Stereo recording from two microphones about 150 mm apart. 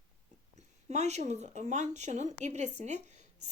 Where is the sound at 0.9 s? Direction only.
50° right (ahead or behind).